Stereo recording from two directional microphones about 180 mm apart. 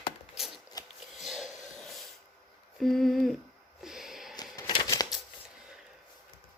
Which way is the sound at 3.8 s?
Centre (ahead or behind).